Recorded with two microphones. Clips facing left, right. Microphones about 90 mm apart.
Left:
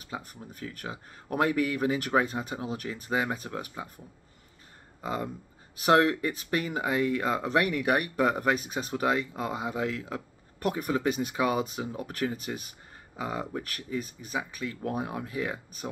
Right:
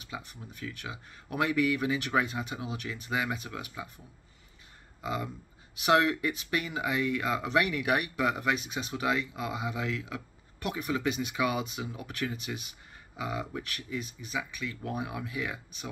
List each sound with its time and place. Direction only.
0.0 s speech: 40° left (ahead or behind)
5.0 s speech: 40° left (ahead or behind)